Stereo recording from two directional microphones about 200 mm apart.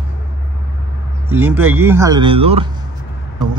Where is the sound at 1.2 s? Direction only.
10° right (ahead or behind).